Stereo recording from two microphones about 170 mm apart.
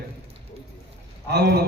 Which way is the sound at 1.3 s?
75° right (ahead or behind).